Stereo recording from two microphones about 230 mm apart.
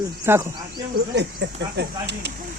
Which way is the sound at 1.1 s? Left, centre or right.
Right.